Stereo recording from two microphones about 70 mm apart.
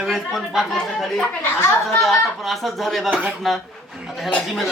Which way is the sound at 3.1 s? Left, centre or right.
Right.